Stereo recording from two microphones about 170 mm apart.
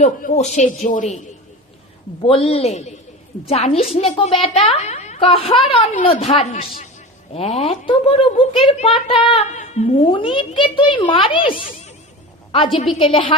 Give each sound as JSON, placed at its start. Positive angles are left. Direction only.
{"t": 0.0, "sound": "a man's voice", "side_deg": 45}
{"t": 2.2, "sound": "a woman's voice", "side_deg": 35}
{"t": 9.6, "sound": "speech", "side_deg": 45}
{"t": 10.1, "sound": "a woman's voice", "side_deg": 30}